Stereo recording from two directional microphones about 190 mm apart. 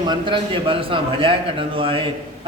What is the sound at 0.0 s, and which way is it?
A man's voice, 25° right (ahead or behind).